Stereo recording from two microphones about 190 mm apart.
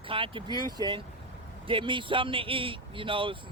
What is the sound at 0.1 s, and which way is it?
Speech, 25° right (ahead or behind).